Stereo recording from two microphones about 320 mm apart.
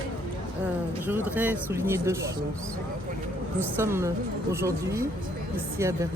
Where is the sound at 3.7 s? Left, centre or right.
Centre.